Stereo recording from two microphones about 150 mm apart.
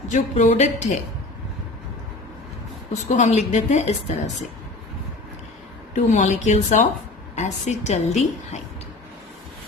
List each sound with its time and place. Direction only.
0.1 s a woman's voice: 50° left (ahead or behind)
2.9 s a woman's voice: 50° left (ahead or behind)
5.9 s a woman's voice: 50° left (ahead or behind)